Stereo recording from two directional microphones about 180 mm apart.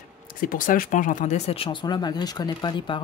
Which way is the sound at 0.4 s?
50° left (ahead or behind).